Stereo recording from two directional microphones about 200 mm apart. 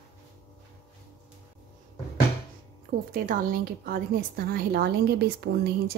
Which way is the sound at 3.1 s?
45° right (ahead or behind).